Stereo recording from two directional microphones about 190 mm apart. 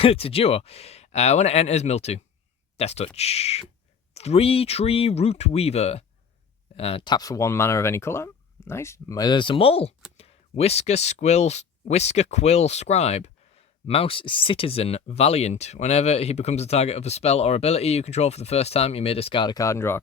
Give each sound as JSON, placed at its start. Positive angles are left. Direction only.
{"t": 0.0, "sound": "speech", "side_deg": 30}